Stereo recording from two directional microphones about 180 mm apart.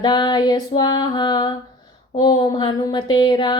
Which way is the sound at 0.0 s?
25° left (ahead or behind).